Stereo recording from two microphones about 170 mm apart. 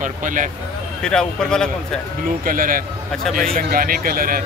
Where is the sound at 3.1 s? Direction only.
Centre (ahead or behind).